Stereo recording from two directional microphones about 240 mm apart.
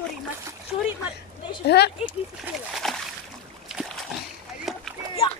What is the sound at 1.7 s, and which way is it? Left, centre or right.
Speech, left.